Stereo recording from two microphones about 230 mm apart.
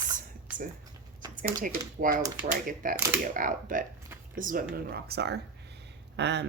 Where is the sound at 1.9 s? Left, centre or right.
Right.